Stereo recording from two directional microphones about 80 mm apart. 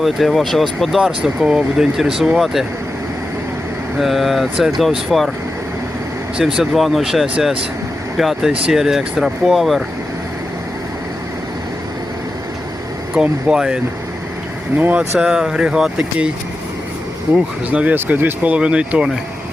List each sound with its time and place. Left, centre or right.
0.0 s speech: centre
3.9 s speech: centre
6.3 s speech: centre
13.1 s speech: centre
14.8 s speech: right
15.2 s speech: centre
17.3 s speech: centre